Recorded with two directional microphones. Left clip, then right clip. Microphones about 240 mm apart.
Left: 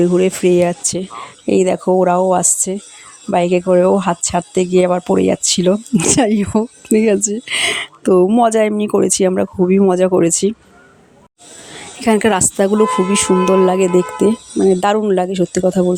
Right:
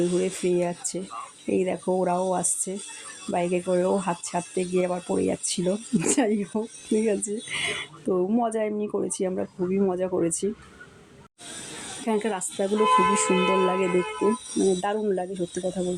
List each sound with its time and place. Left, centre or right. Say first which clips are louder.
0.0 s speech: left 12 dB; left
12.0 s a woman's voice: left 14 dB; left